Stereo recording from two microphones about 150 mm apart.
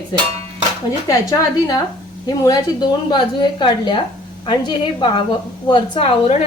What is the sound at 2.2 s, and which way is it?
A woman's voice, 25° left (ahead or behind).